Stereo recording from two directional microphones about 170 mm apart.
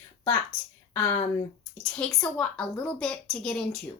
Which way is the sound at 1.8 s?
5° left (ahead or behind).